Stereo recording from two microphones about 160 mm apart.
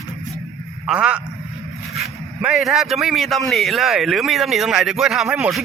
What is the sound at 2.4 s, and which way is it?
Speech, centre (ahead or behind).